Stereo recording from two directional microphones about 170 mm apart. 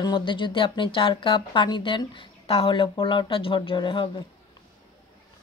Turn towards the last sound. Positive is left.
turn(degrees=30)  # may be behind; listen again after turning